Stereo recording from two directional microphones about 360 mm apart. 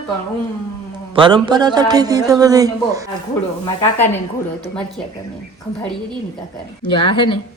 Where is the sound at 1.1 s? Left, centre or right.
Centre.